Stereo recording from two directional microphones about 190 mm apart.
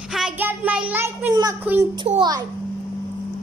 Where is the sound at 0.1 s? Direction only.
5° right (ahead or behind).